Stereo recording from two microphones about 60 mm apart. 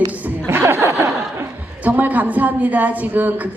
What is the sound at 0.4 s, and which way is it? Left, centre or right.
Chuckle, right.